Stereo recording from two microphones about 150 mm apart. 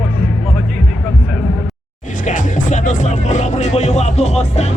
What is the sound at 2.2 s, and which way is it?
Music, 55° left (ahead or behind).